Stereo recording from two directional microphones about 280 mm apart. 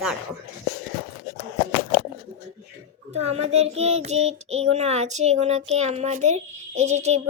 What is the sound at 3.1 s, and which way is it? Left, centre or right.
A child's voice, right.